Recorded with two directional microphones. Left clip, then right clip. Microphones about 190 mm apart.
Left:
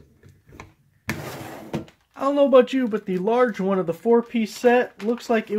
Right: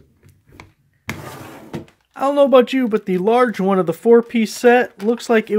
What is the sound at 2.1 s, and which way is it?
Speech, 45° right (ahead or behind).